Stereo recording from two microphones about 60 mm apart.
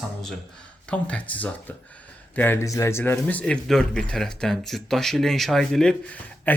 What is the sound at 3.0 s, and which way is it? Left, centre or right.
Speech, left.